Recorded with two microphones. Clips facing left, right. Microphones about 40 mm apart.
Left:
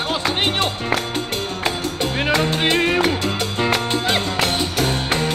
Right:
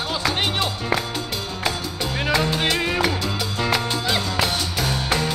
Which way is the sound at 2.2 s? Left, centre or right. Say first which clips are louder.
Left 2 dB; left.